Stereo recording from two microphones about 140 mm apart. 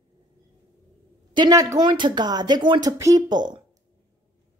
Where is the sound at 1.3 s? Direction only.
30° right (ahead or behind).